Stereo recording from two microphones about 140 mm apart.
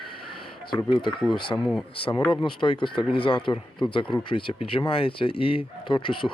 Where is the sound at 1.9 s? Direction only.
40° left (ahead or behind).